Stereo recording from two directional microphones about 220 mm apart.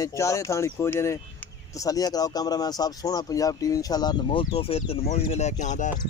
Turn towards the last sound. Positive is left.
turn(degrees=35)  # may be behind; listen again after turning